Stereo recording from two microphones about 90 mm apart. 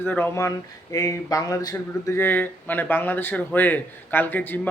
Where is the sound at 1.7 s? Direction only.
25° left (ahead or behind).